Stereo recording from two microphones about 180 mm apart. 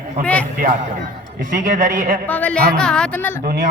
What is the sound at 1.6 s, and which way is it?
Speech, 50° right (ahead or behind).